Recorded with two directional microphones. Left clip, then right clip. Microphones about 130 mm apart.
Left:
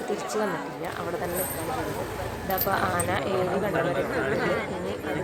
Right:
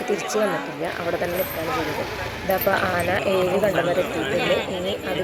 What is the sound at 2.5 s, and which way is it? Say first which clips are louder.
Speech: right 5 dB; 25° right (ahead or behind).